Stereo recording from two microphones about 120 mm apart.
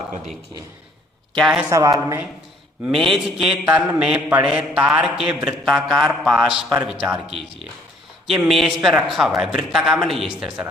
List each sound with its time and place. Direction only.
1.4 s a man's voice: centre (ahead or behind)
1.7 s speech: 25° right (ahead or behind)
2.8 s a man's voice: centre (ahead or behind)
3.2 s a sound: 5° right (ahead or behind)
5.6 s a man's voice: centre (ahead or behind)